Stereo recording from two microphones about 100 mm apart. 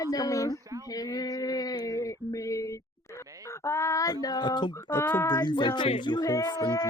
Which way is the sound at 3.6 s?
30° left (ahead or behind).